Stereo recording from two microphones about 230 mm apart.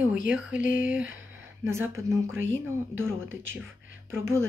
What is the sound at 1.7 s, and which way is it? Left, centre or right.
Speech, centre.